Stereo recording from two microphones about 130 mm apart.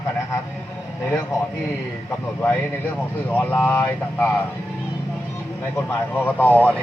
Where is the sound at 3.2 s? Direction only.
15° left (ahead or behind).